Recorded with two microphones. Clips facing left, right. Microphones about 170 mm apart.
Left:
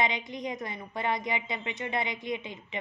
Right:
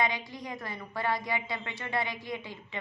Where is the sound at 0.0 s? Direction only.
20° left (ahead or behind).